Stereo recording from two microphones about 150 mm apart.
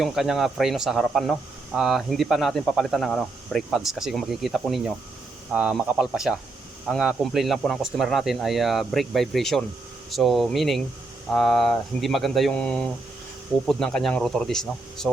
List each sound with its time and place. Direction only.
0.0 s speech: centre (ahead or behind)